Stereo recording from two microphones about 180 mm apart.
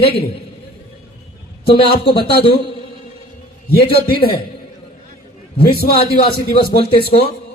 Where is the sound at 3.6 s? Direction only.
60° left (ahead or behind).